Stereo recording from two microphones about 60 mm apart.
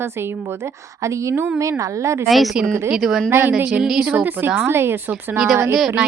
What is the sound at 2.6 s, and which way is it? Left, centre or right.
Speech, right.